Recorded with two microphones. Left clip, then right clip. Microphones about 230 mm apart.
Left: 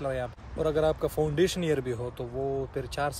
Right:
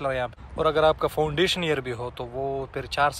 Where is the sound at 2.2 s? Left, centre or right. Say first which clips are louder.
Right 3 dB; centre.